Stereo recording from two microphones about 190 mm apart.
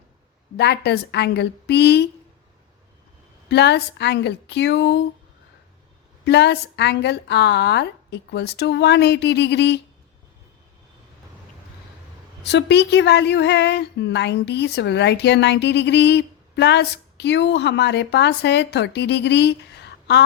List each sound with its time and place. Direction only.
0.5 s a woman's voice: 60° left (ahead or behind)
3.5 s a woman's voice: 60° left (ahead or behind)
6.2 s a woman's voice: 60° left (ahead or behind)
12.4 s a woman's voice: 65° left (ahead or behind)